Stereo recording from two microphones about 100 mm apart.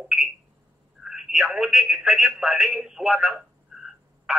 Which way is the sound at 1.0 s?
5° right (ahead or behind).